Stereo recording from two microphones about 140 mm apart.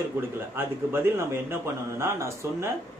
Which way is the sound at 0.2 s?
15° right (ahead or behind).